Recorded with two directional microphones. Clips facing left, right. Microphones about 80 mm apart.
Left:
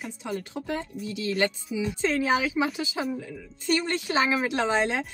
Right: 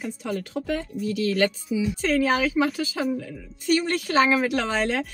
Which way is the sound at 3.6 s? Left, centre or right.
Left.